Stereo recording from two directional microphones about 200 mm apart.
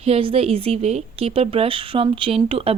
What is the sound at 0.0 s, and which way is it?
Speech, 30° right (ahead or behind).